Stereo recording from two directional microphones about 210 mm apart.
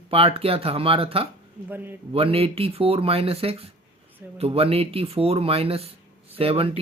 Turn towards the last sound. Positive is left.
turn(degrees=-25)  # may be behind; listen again after turning